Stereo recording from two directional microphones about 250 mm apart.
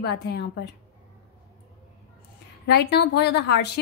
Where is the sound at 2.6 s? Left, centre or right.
Left.